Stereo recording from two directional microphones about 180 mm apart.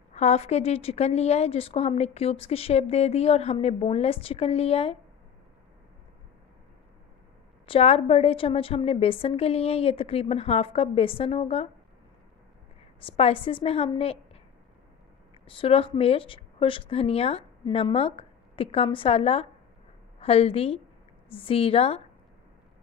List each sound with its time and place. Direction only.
0.1 s a woman's voice: 40° left (ahead or behind)
7.6 s a woman's voice: 30° left (ahead or behind)
13.0 s a woman's voice: 30° left (ahead or behind)
15.4 s a woman's voice: 30° left (ahead or behind)